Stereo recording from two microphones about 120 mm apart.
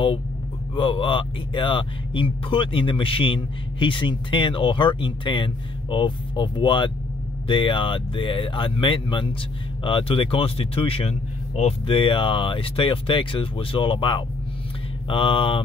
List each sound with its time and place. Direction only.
0.7 s speech: 45° left (ahead or behind)